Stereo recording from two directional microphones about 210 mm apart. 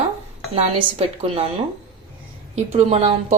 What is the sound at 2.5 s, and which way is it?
Speech, 30° right (ahead or behind).